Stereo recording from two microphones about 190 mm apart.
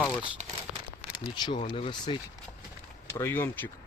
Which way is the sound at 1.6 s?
25° left (ahead or behind).